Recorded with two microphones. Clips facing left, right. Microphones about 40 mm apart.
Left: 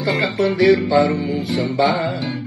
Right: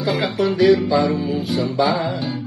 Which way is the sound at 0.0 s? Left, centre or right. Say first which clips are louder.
Left 1 dB; left.